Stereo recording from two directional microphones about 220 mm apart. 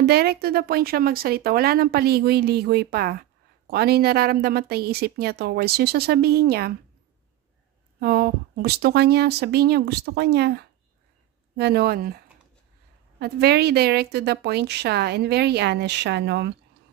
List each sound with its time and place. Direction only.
0.0 s speech: 45° right (ahead or behind)
8.0 s speech: 45° right (ahead or behind)
13.2 s speech: 45° right (ahead or behind)